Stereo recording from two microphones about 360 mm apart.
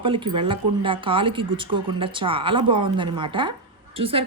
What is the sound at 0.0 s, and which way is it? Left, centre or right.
A woman's voice, centre.